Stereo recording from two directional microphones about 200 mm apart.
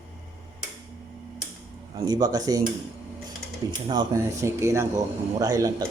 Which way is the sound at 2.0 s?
20° right (ahead or behind).